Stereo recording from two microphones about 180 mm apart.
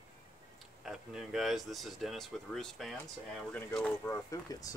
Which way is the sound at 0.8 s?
Centre (ahead or behind).